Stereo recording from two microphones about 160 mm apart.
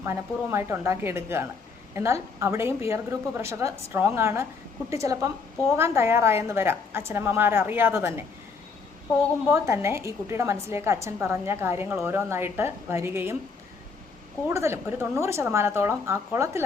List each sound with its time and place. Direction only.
0.0 s a woman's voice: 15° right (ahead or behind)
9.5 s a woman's voice: 15° right (ahead or behind)
14.5 s a woman's voice: 15° right (ahead or behind)